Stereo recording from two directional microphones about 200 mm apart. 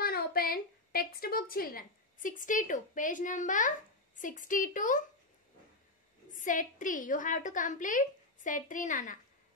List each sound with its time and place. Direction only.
0.0 s a sound: 50° left (ahead or behind)
4.2 s a woman's voice: 40° left (ahead or behind)
6.3 s a woman's voice: 40° left (ahead or behind)